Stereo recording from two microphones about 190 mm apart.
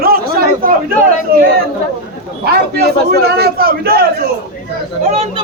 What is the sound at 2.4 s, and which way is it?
A man's voice, 55° right (ahead or behind).